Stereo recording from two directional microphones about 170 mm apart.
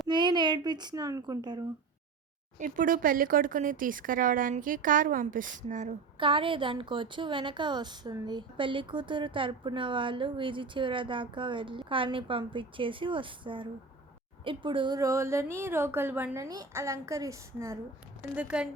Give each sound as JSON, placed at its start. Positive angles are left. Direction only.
{"t": 0.1, "sound": "a sound", "side_deg": -25}
{"t": 2.6, "sound": "speech", "side_deg": -50}
{"t": 6.1, "sound": "a woman's voice", "side_deg": -30}
{"t": 18.2, "sound": "a woman's voice", "side_deg": -5}